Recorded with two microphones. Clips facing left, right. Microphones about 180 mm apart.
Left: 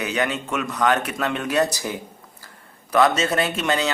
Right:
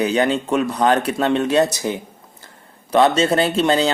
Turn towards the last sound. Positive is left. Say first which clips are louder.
# right 6 dB
turn(degrees=-30)  # may be behind; listen again after turning